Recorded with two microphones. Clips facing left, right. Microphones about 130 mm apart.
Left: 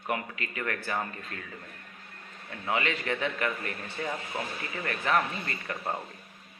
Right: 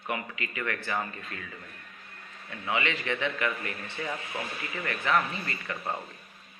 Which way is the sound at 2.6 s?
40° left (ahead or behind).